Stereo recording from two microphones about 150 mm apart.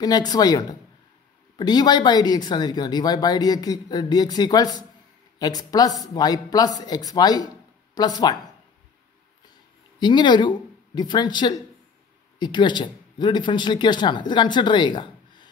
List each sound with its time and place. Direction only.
0.0 s speech: 25° left (ahead or behind)
9.9 s speech: 30° left (ahead or behind)